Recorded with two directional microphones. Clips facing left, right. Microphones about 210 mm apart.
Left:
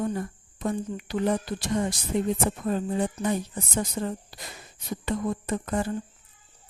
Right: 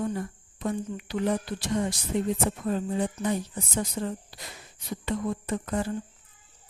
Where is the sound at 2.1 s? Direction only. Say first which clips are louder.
Left 2 dB; 45° left (ahead or behind).